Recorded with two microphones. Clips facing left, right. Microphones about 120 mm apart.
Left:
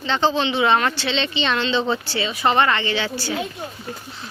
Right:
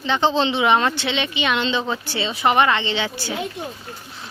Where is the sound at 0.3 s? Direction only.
30° right (ahead or behind).